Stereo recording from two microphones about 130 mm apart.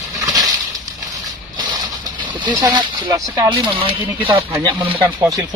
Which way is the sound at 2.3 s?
35° right (ahead or behind).